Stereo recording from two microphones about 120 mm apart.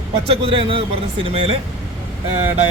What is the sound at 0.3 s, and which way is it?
A man's voice, 50° right (ahead or behind).